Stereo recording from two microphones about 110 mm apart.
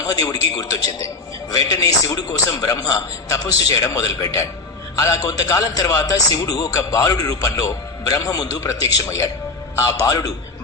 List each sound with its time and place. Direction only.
0.0 s a man's voice: 35° left (ahead or behind)